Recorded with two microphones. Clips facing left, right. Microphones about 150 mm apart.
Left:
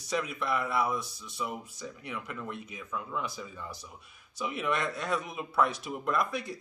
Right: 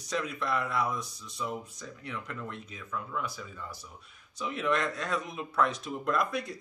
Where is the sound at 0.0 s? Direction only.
5° left (ahead or behind).